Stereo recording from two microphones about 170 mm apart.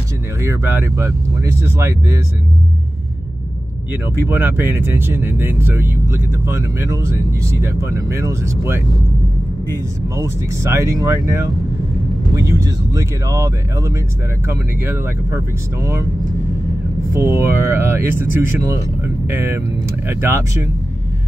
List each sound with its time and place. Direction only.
0.4 s speech: 15° right (ahead or behind)
3.9 s speech: 10° right (ahead or behind)
17.1 s speech: 15° right (ahead or behind)